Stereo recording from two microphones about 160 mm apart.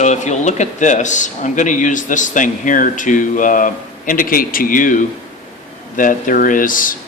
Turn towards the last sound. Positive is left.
turn(degrees=60)  # may be behind; listen again after turning